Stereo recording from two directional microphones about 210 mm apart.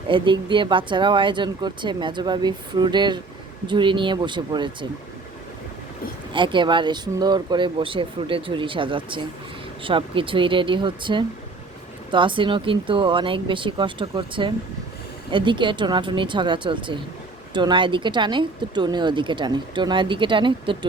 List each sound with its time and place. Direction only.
0.1 s speech: 25° right (ahead or behind)
6.3 s speech: 25° right (ahead or behind)